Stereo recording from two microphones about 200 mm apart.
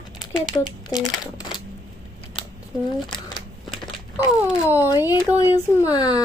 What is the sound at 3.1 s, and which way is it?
Shuffling cards, 25° left (ahead or behind).